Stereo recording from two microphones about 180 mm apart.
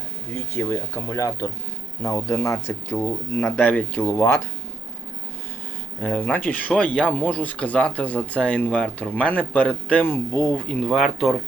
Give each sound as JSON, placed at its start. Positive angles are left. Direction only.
{"t": 0.3, "sound": "speech", "side_deg": 15}
{"t": 6.1, "sound": "speech", "side_deg": 10}